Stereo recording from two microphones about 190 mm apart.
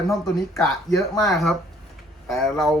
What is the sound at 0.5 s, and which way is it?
Speech, 15° left (ahead or behind).